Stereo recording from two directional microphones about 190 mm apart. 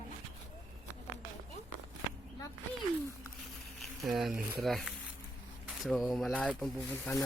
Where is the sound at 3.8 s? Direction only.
Centre (ahead or behind).